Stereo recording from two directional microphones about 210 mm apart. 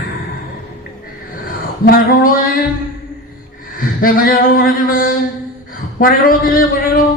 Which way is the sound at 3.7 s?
40° left (ahead or behind).